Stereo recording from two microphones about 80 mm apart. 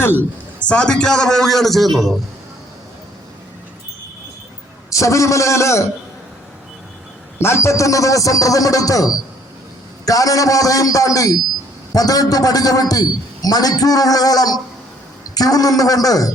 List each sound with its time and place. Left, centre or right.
0.6 s a man's voice: centre
4.9 s a man's voice: left
7.3 s a man's voice: left